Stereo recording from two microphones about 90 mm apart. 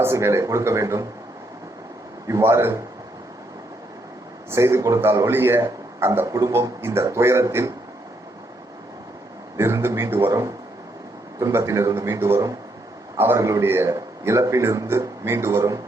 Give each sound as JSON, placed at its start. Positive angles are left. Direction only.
{"t": 0.0, "sound": "a man's voice", "side_deg": -30}
{"t": 2.2, "sound": "a man's voice", "side_deg": -30}
{"t": 4.5, "sound": "a man's voice", "side_deg": -30}
{"t": 6.5, "sound": "a man's voice", "side_deg": -30}
{"t": 9.6, "sound": "a man's voice", "side_deg": -30}
{"t": 11.3, "sound": "a man's voice", "side_deg": -35}